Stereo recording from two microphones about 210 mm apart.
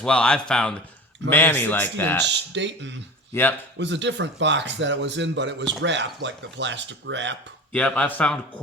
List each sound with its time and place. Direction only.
0.0 s a man's voice: 5° left (ahead or behind)
2.2 s speech: 55° right (ahead or behind)
3.3 s a man's voice: 10° left (ahead or behind)
3.8 s speech: 55° right (ahead or behind)
7.7 s a man's voice: 5° left (ahead or behind)